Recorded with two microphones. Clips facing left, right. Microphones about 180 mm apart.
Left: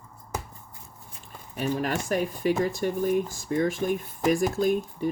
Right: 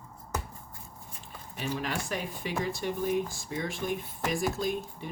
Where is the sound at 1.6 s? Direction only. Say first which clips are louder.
Left 6 dB; 45° left (ahead or behind).